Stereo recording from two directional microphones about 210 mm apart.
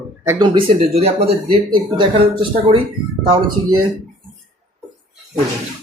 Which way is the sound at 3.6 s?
90° right.